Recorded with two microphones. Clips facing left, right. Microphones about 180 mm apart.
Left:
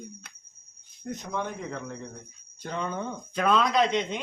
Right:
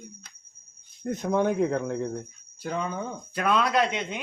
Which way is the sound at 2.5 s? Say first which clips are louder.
Right 2 dB; 5° right (ahead or behind).